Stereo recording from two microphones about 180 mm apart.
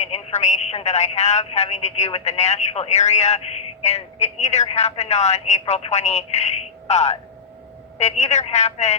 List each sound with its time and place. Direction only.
0.0 s speech: 40° left (ahead or behind)